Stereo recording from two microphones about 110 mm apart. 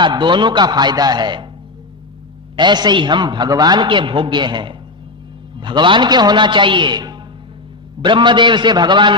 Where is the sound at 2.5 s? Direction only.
40° right (ahead or behind).